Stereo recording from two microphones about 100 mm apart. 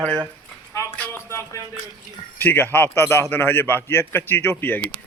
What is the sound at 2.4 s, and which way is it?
A man's voice, 20° left (ahead or behind).